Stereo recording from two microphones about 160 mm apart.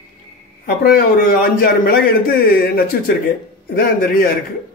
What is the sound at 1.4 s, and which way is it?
Speech, 70° left (ahead or behind).